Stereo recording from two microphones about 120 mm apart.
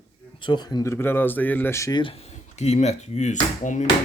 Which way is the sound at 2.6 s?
65° left (ahead or behind).